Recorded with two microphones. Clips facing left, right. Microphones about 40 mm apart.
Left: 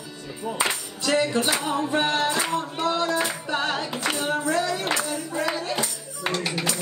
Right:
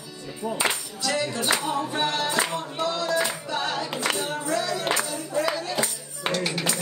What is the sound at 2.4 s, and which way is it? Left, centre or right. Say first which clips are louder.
Singing: left 3 dB; left.